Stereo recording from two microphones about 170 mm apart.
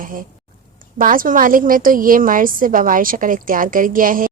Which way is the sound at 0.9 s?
55° right (ahead or behind).